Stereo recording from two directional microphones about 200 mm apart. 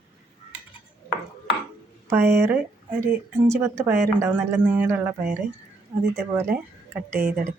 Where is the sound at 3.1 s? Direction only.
15° right (ahead or behind).